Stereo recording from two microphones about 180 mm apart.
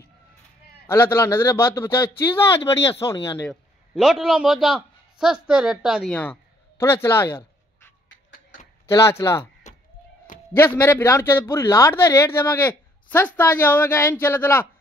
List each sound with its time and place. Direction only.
0.8 s a man's voice: 15° left (ahead or behind)
3.4 s a man's voice: centre (ahead or behind)
6.8 s a sound: 15° left (ahead or behind)
8.8 s a man's voice: 15° left (ahead or behind)
9.6 s a sound: 40° left (ahead or behind)
10.5 s a man's voice: 10° left (ahead or behind)